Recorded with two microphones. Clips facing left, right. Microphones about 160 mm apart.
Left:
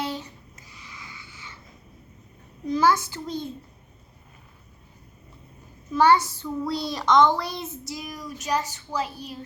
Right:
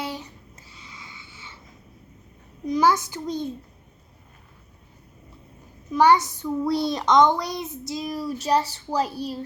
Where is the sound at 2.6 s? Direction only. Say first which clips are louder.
Right 1 dB; 20° right (ahead or behind).